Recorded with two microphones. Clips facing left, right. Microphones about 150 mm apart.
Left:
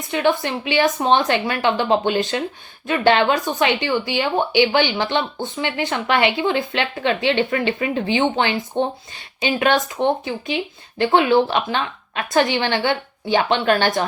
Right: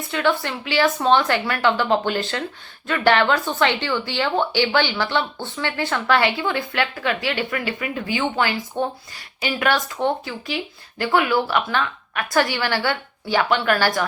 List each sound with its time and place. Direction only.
0.1 s speech: 20° left (ahead or behind)